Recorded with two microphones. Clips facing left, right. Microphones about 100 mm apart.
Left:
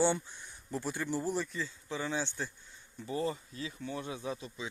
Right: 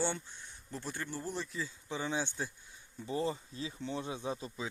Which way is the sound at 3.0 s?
25° right (ahead or behind).